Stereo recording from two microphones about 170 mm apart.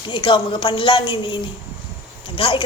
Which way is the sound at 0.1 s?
30° left (ahead or behind).